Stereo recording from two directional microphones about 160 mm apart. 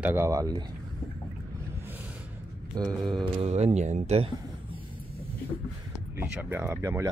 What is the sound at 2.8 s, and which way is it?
Speech, 25° right (ahead or behind).